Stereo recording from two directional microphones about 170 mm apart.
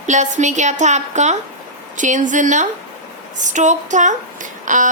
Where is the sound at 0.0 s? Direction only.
45° right (ahead or behind).